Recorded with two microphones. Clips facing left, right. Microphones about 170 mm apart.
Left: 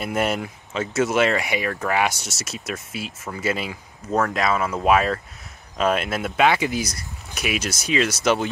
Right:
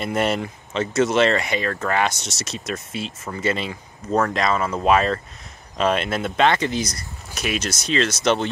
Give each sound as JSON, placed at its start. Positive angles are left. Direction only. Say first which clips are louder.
{"t": 0.0, "sound": "speech", "louder": "right 1 dB", "side_deg": 5}